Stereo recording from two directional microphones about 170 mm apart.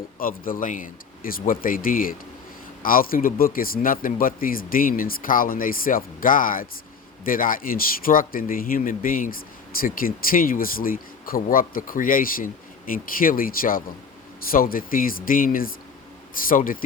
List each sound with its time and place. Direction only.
0.2 s a man's voice: 55° left (ahead or behind)